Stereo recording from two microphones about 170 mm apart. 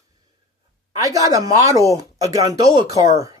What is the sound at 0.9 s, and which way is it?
Speech, 20° right (ahead or behind).